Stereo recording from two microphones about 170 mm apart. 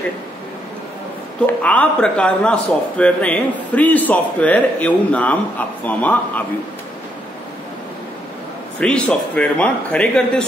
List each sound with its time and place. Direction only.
1.4 s a man's voice: 10° left (ahead or behind)
8.7 s a man's voice: 5° left (ahead or behind)